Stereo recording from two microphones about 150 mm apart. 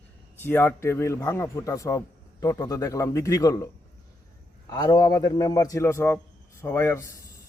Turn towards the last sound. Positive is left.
turn(degrees=15)  # may be behind; listen again after turning